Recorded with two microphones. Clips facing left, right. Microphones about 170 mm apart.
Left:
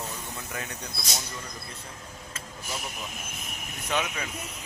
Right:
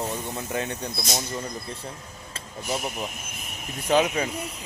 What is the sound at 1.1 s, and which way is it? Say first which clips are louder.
Speech: right 7 dB; 40° right (ahead or behind).